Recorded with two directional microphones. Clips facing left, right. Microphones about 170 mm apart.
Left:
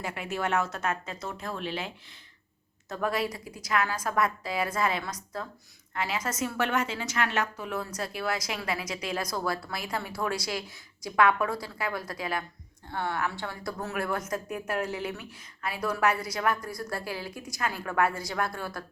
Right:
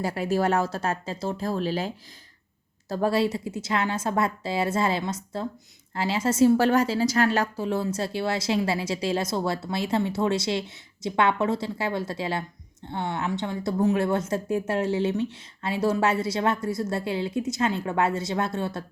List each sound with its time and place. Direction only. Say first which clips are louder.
0.0 s speech: right 8 dB; 35° right (ahead or behind)
2.9 s a woman's voice: right 6 dB; 30° right (ahead or behind)